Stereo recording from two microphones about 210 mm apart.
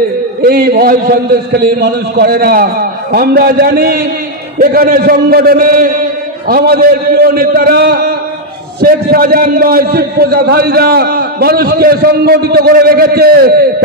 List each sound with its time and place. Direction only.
0.4 s a man's voice: 45° right (ahead or behind)